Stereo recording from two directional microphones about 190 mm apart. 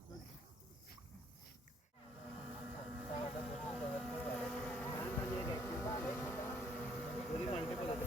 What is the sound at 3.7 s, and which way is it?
Boat, 5° left (ahead or behind).